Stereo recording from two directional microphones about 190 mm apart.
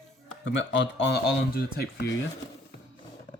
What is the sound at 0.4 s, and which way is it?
Speech, 70° left (ahead or behind).